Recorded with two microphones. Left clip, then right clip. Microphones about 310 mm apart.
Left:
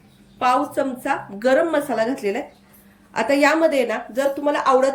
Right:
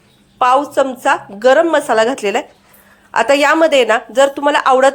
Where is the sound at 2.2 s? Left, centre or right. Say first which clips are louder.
Right 7 dB; right.